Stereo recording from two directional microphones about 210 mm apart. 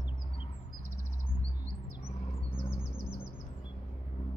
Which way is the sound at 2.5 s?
25° left (ahead or behind).